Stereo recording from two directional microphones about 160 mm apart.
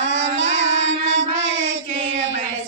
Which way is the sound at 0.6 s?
45° right (ahead or behind).